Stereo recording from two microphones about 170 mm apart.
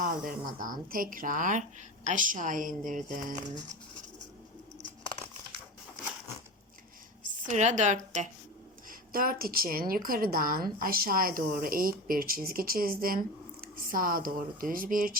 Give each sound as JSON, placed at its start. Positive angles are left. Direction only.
{"t": 0.0, "sound": "speech", "side_deg": -50}
{"t": 7.3, "sound": "a woman's voice", "side_deg": -45}
{"t": 8.9, "sound": "a woman's voice", "side_deg": -55}